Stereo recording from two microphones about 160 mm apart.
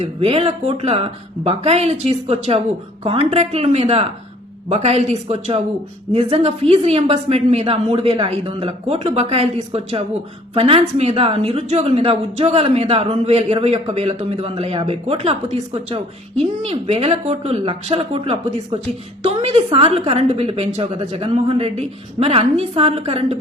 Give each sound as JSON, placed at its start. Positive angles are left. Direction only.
{"t": 0.2, "sound": "a woman's voice", "side_deg": -40}